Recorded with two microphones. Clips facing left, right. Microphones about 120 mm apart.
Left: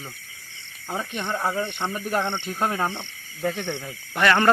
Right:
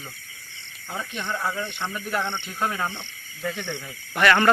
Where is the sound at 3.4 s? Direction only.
55° left (ahead or behind).